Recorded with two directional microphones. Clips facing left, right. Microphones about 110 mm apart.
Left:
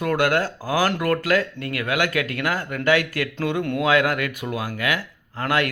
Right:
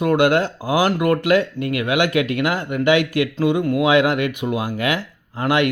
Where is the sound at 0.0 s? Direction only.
20° right (ahead or behind).